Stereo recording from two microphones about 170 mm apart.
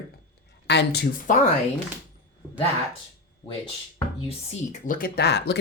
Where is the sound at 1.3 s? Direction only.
50° left (ahead or behind).